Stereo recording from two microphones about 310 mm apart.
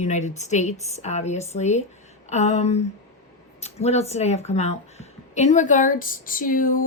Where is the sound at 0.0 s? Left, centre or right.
Left.